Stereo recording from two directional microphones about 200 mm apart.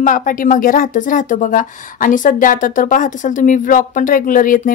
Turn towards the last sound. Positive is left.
turn(degrees=45)  # may be behind; listen again after turning